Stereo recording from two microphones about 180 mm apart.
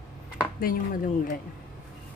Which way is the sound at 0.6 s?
50° left (ahead or behind).